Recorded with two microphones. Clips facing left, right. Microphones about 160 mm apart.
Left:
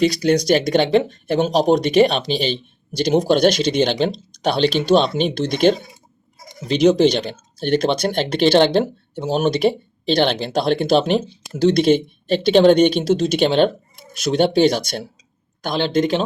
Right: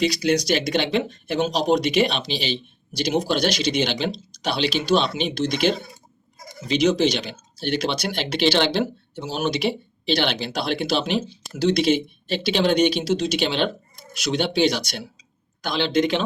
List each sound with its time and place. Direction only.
0.0 s speech: 50° left (ahead or behind)